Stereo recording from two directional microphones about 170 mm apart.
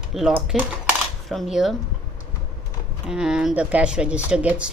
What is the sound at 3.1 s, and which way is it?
Speech, 5° right (ahead or behind).